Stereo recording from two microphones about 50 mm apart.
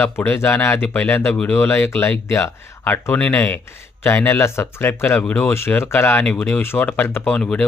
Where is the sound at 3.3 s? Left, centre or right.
Left.